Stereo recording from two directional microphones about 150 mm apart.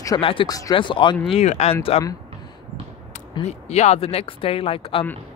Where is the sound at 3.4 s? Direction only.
50° left (ahead or behind).